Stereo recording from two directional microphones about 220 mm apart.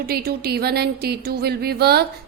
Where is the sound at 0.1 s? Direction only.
45° right (ahead or behind).